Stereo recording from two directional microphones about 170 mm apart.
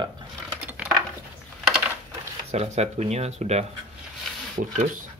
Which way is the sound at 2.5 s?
40° right (ahead or behind).